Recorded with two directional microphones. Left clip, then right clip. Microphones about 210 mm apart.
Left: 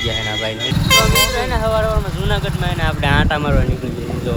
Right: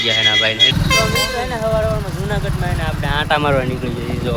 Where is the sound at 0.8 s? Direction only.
50° left (ahead or behind).